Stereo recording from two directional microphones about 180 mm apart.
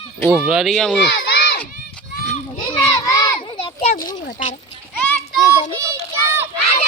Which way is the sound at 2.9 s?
20° left (ahead or behind).